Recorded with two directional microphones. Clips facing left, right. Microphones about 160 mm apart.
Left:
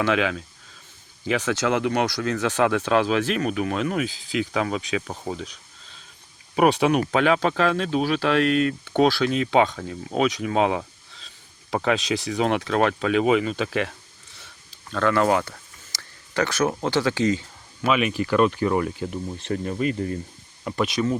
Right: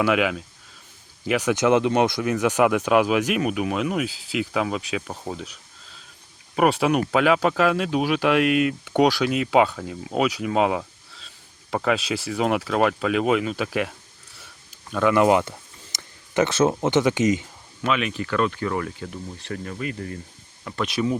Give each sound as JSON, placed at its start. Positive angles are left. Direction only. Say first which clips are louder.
{"t": 0.0, "sound": "speech", "louder": "right 1 dB", "side_deg": -10}
{"t": 6.6, "sound": "speech", "louder": "left 1 dB", "side_deg": 0}
{"t": 14.3, "sound": "a sound", "louder": "right 1 dB", "side_deg": -10}
{"t": 17.8, "sound": "speech", "louder": "left 3 dB", "side_deg": 10}
{"t": 20.8, "sound": "speech", "louder": "even", "side_deg": -5}